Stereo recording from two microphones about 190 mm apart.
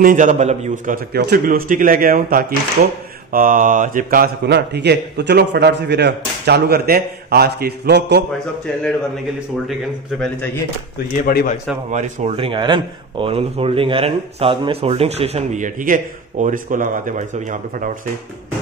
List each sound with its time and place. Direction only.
0.0 s a man's voice: 45° right (ahead or behind); by 8.2 s 60° right (ahead or behind)
11.1 s speech: 45° left (ahead or behind)
11.9 s speech: 40° right (ahead or behind)